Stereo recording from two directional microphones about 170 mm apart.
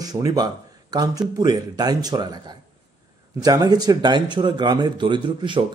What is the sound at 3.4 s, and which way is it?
Speech, 25° right (ahead or behind).